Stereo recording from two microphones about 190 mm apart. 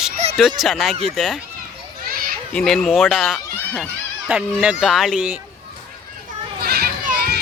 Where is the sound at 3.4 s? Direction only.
10° left (ahead or behind).